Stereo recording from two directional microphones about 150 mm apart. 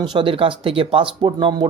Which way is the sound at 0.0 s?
35° right (ahead or behind).